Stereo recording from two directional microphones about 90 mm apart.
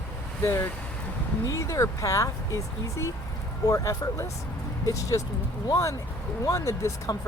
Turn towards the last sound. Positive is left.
turn(degrees=50)  # may be behind; listen again after turning